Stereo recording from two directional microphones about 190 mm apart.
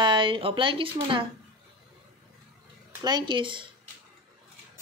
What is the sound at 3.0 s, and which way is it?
Speech, 20° right (ahead or behind).